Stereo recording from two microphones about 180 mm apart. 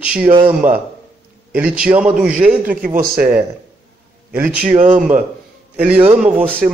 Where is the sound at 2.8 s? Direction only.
50° right (ahead or behind).